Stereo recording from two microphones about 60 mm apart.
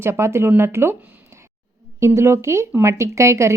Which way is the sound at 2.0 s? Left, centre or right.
Right.